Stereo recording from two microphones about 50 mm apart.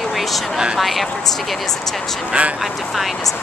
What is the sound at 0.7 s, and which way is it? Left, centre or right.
Speech, centre.